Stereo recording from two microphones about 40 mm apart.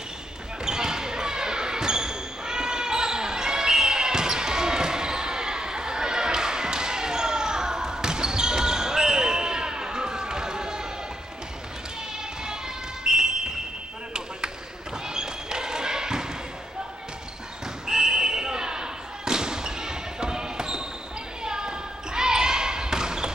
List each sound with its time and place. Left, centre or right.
0.7 s basketball bounce: centre
13.0 s a sound: centre
15.1 s basketball bounce: centre
17.8 s basketball bounce: centre